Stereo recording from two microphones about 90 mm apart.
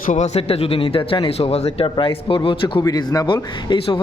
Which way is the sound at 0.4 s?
90° left.